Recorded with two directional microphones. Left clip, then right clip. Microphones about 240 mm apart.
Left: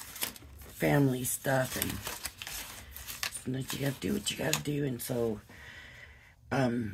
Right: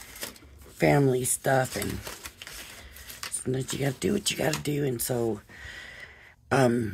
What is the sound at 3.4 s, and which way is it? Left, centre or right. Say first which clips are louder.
Speech: right 6 dB; right.